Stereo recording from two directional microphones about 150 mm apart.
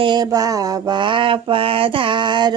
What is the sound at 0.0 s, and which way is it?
Mantra, 30° right (ahead or behind).